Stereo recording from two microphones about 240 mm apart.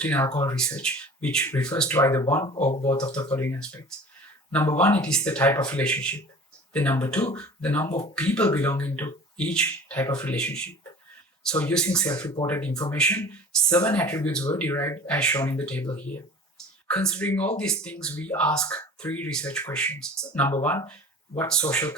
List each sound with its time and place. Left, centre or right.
0.0 s speech: centre